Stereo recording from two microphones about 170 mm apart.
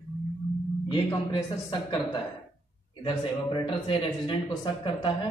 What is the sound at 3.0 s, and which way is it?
A man's voice, 30° left (ahead or behind).